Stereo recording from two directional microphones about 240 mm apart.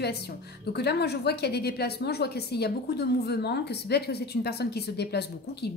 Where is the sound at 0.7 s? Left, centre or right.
Left.